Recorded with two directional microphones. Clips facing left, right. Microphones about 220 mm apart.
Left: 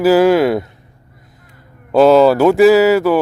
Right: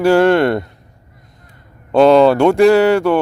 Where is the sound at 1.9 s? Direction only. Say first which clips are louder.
Even; 5° left (ahead or behind).